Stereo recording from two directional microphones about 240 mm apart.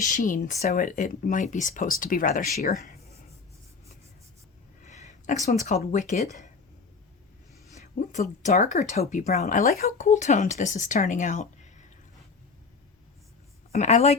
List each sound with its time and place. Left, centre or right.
0.0 s speech: left
4.8 s a sound: left
5.6 s speech: left
7.8 s speech: left
13.7 s a woman's voice: left